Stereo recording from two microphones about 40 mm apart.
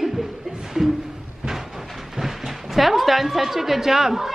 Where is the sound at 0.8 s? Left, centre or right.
Centre.